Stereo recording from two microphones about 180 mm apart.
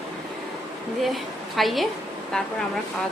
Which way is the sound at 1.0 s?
Centre (ahead or behind).